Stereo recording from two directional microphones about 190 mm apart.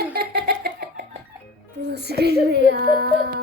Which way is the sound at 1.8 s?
60° right (ahead or behind).